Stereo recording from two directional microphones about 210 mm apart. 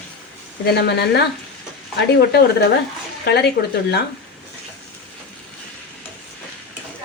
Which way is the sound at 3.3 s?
50° left (ahead or behind).